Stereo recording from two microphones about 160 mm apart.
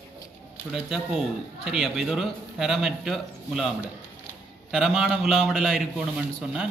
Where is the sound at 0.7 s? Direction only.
5° right (ahead or behind).